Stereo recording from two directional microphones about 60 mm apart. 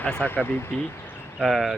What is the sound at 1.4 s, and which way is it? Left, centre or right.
Speech, centre.